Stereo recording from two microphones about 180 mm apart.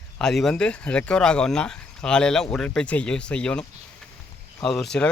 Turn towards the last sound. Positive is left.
turn(degrees=0)  # may be behind; listen again after turning